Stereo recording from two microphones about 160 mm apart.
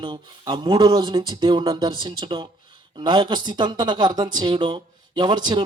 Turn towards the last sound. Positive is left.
turn(degrees=-30)  # may be behind; listen again after turning